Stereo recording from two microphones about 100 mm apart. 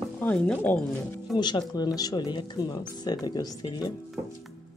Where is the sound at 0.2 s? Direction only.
15° left (ahead or behind).